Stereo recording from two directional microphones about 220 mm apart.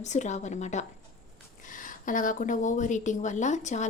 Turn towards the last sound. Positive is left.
turn(degrees=30)  # may be behind; listen again after turning